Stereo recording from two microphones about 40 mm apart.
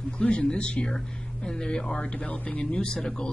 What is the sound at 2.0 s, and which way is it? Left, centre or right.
Speech, left.